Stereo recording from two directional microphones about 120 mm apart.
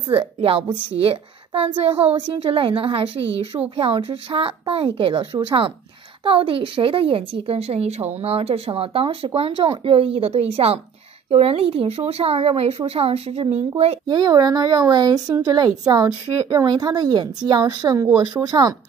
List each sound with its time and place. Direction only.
0.2 s a woman's voice: 50° right (ahead or behind)
14.0 s speech: 35° right (ahead or behind)